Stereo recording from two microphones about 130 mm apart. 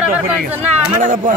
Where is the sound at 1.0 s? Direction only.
75° right (ahead or behind).